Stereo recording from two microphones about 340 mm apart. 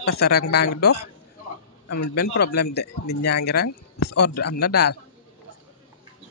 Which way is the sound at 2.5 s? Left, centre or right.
Left.